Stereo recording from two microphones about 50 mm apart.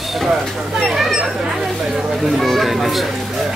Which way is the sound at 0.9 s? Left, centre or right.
Centre.